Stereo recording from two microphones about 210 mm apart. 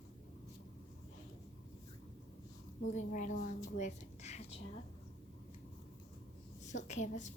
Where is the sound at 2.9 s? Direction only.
35° left (ahead or behind).